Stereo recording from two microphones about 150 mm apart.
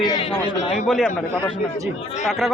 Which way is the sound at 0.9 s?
Centre (ahead or behind).